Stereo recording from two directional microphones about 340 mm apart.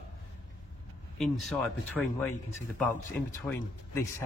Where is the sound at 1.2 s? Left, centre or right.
Centre.